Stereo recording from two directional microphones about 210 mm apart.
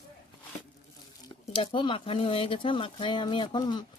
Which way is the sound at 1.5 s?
25° left (ahead or behind).